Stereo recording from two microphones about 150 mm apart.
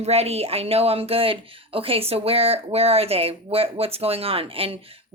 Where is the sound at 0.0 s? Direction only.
45° right (ahead or behind).